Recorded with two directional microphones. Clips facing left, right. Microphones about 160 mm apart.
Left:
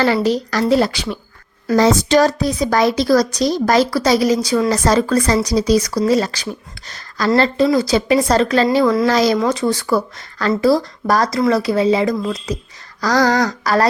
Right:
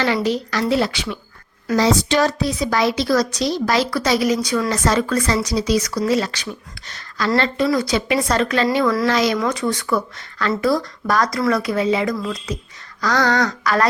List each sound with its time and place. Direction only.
0.0 s a woman's voice: 40° left (ahead or behind)